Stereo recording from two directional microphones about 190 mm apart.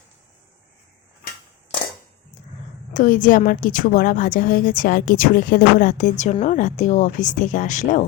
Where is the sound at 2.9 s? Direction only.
45° left (ahead or behind).